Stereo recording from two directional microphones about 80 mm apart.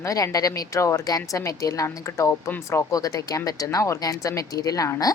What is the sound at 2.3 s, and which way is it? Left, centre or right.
A woman's voice, left.